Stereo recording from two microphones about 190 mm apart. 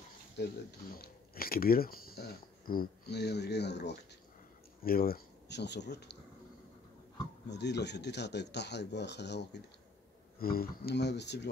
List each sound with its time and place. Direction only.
0.4 s speech: 60° left (ahead or behind)
4.8 s speech: 50° left (ahead or behind)
7.4 s speech: 65° left (ahead or behind)
10.4 s speech: 50° left (ahead or behind)